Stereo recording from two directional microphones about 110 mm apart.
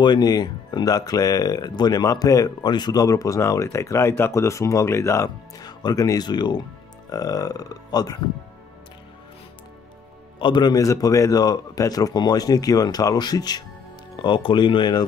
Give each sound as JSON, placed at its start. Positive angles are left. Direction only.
{"t": 0.0, "sound": "speech", "side_deg": 40}
{"t": 10.4, "sound": "speech", "side_deg": 40}